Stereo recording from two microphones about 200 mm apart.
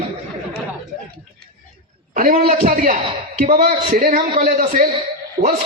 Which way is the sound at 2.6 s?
45° right (ahead or behind).